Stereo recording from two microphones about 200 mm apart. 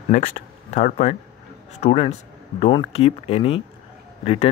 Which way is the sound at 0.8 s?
35° left (ahead or behind).